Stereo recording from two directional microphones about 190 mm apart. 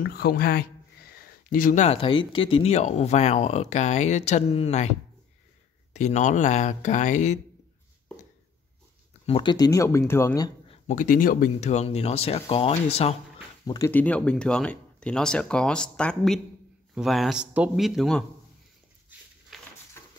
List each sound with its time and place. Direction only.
0.0 s speech: 50° left (ahead or behind); by 4.9 s 35° left (ahead or behind)
5.9 s speech: 40° left (ahead or behind)
9.2 s speech: 30° left (ahead or behind)
10.7 s speech: 40° left (ahead or behind)
13.7 s speech: 15° left (ahead or behind); by 18.2 s centre (ahead or behind)
19.5 s a sound: centre (ahead or behind)